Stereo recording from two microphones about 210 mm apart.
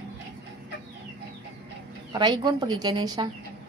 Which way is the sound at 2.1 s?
20° right (ahead or behind).